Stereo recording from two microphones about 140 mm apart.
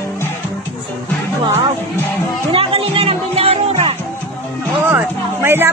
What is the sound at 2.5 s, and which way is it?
Music, 40° right (ahead or behind).